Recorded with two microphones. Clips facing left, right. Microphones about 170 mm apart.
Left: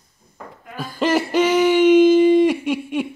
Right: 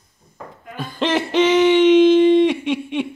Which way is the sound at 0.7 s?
5° left (ahead or behind).